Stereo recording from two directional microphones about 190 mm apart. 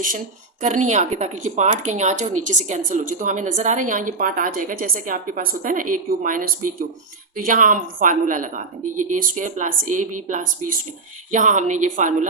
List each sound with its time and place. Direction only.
0.6 s a woman's voice: 40° right (ahead or behind)